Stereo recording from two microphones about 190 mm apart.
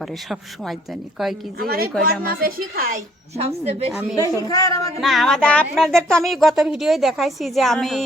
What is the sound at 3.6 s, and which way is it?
Speech, 35° right (ahead or behind).